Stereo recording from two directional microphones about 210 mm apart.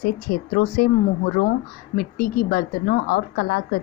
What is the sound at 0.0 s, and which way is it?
Speech, 45° left (ahead or behind).